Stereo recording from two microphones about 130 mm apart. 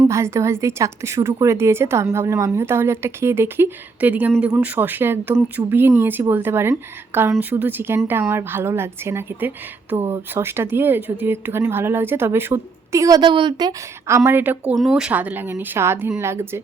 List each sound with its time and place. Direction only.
0.1 s a woman's voice: 20° right (ahead or behind)
13.2 s a woman's voice: 40° right (ahead or behind)
14.3 s speech: 15° right (ahead or behind)
14.8 s a woman's voice: centre (ahead or behind); by 16.6 s 20° right (ahead or behind)